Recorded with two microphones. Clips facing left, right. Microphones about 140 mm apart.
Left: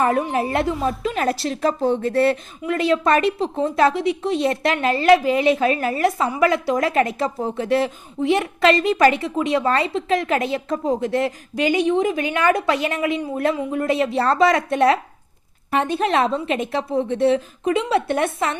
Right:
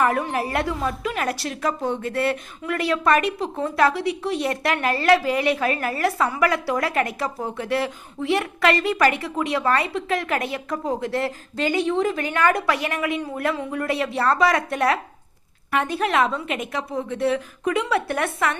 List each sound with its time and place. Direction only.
0.0 s a woman's voice: 20° left (ahead or behind)